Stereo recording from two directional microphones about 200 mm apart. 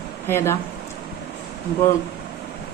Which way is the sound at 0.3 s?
10° left (ahead or behind).